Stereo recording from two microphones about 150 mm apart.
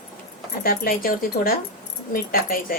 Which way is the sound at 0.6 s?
75° left (ahead or behind).